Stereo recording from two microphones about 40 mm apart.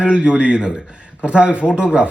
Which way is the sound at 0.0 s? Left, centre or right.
Right.